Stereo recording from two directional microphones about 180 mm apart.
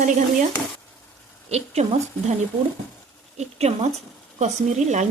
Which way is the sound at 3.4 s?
35° right (ahead or behind).